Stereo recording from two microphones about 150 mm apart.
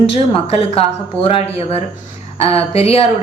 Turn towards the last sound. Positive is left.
turn(degrees=40)  # may be behind; listen again after turning